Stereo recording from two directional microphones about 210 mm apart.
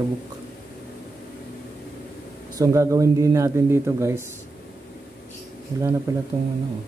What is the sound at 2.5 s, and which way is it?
Speech, 15° right (ahead or behind).